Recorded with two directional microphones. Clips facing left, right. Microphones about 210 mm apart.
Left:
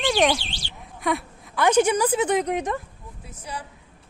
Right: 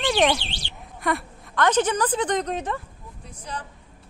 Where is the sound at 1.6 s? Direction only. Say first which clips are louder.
Left 2 dB; 10° left (ahead or behind).